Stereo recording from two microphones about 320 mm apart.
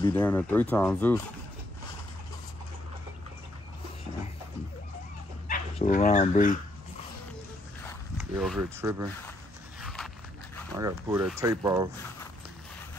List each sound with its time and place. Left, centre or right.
0.0 s speech: centre
5.5 s speech: left
7.8 s zipper: centre
9.8 s walk: centre
10.8 s speech: centre